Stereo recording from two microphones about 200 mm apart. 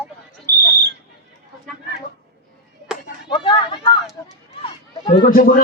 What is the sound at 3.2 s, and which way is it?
Speech, 25° left (ahead or behind).